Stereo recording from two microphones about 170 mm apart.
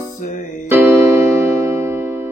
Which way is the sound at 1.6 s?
15° right (ahead or behind).